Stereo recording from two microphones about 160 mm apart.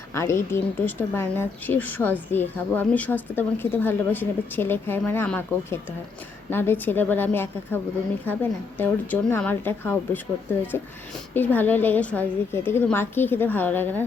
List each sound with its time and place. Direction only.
0.1 s speech: 15° left (ahead or behind)
11.3 s speech: 10° left (ahead or behind)